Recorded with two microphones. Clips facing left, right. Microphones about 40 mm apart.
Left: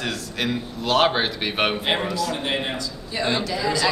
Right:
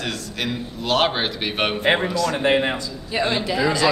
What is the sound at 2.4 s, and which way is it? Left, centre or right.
Speech, right.